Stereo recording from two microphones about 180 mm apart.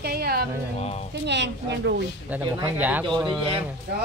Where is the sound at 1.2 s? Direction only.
75° right (ahead or behind).